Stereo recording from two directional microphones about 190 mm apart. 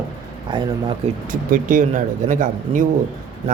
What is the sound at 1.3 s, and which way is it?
Speech, 45° right (ahead or behind).